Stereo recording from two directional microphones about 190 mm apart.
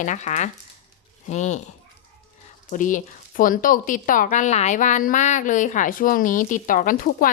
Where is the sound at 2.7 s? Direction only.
45° left (ahead or behind).